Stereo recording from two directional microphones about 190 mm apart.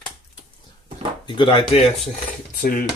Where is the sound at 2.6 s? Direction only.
50° left (ahead or behind).